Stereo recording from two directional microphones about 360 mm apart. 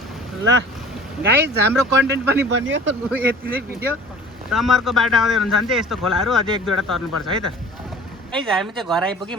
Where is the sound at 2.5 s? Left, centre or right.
Right.